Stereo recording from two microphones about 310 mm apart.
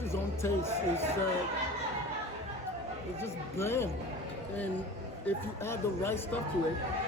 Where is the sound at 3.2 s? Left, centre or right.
Centre.